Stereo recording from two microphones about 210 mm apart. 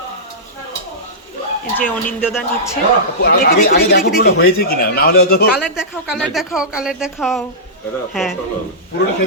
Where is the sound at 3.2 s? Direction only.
45° left (ahead or behind).